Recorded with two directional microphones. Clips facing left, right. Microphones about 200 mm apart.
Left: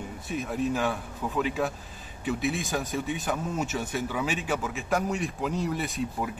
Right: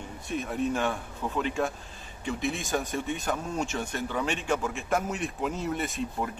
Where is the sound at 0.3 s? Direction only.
Centre (ahead or behind).